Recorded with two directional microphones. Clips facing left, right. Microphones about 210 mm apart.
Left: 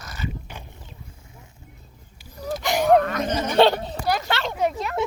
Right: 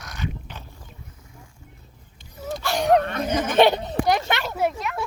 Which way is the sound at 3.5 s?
15° right (ahead or behind).